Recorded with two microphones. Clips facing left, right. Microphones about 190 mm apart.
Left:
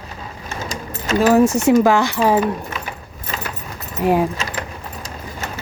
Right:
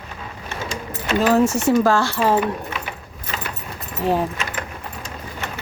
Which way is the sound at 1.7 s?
15° left (ahead or behind).